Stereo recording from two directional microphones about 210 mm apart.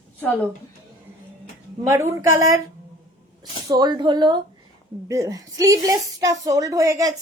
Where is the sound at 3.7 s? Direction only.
20° right (ahead or behind).